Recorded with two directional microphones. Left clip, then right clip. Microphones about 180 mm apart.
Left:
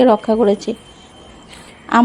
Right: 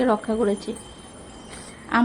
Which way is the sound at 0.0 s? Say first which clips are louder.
Left 10 dB; 30° left (ahead or behind).